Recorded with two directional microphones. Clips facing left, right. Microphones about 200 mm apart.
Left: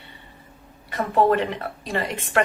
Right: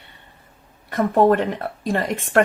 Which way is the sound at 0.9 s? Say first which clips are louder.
Right 4 dB; 50° right (ahead or behind).